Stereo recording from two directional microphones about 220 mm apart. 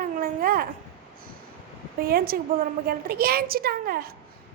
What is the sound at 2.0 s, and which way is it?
A woman's voice, 45° right (ahead or behind).